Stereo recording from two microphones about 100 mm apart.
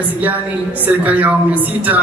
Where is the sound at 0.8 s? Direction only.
15° right (ahead or behind).